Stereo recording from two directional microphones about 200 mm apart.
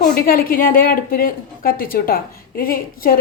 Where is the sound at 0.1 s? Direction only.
45° left (ahead or behind).